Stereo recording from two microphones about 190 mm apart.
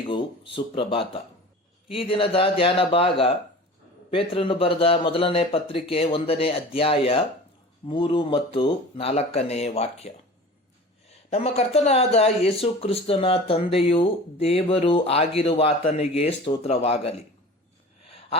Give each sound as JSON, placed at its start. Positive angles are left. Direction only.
{"t": 0.0, "sound": "a man's voice", "side_deg": 25}
{"t": 11.3, "sound": "speech", "side_deg": 35}